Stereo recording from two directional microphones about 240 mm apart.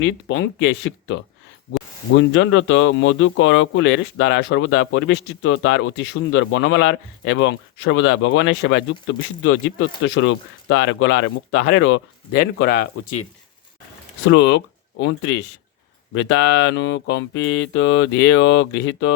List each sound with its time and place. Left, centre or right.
0.0 s speech: left
12.3 s speech: left
14.3 s speech: left
16.6 s speech: left